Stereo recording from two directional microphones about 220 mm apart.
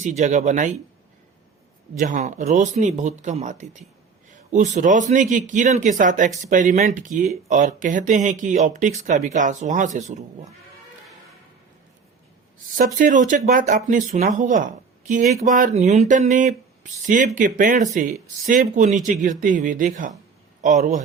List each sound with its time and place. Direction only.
0.0 s speech: 30° right (ahead or behind)
2.0 s speech: 35° right (ahead or behind)
12.7 s speech: 35° right (ahead or behind)